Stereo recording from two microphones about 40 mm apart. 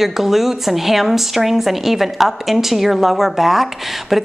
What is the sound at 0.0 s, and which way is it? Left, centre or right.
A woman's voice, centre.